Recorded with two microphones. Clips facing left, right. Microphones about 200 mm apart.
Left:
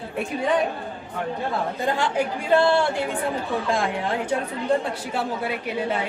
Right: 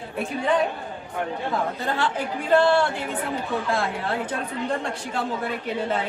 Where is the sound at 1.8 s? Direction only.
10° left (ahead or behind).